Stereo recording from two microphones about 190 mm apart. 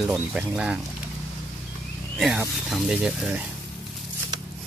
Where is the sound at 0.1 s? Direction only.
5° right (ahead or behind).